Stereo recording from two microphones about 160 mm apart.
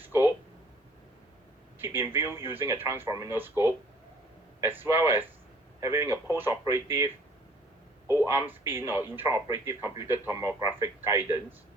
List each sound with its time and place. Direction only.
1.8 s speech: 15° right (ahead or behind)